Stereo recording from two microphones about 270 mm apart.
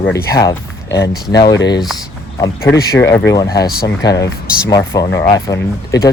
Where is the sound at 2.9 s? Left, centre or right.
Centre.